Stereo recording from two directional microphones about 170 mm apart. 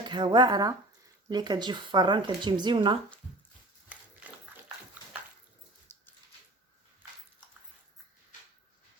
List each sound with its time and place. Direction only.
0.0 s speech: 25° right (ahead or behind)